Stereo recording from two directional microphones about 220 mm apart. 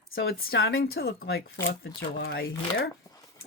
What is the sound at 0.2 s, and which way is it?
Speech, 45° left (ahead or behind).